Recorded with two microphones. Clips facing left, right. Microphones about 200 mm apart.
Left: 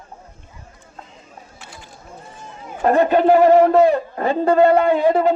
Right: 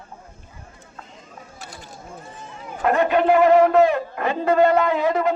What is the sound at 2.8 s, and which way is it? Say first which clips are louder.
A man's voice: left 4 dB; 35° left (ahead or behind).